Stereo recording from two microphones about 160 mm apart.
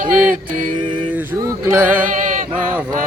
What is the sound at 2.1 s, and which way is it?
Chant, 55° right (ahead or behind).